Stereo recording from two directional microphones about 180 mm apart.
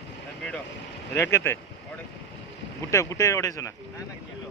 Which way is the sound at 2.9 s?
15° left (ahead or behind).